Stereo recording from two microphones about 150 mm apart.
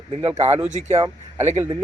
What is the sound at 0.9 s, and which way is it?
Speech, 20° right (ahead or behind).